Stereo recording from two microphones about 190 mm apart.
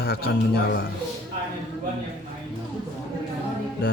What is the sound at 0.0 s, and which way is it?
Speech, 55° left (ahead or behind).